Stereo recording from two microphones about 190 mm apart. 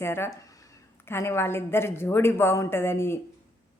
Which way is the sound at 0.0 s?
10° left (ahead or behind).